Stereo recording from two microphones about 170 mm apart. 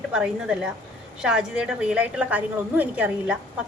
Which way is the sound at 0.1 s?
5° right (ahead or behind).